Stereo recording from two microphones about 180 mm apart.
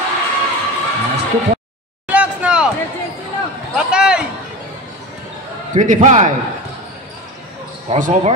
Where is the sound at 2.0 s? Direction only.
5° right (ahead or behind).